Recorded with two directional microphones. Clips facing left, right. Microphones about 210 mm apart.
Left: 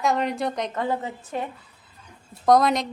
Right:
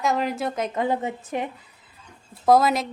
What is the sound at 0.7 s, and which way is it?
Speech, 15° right (ahead or behind).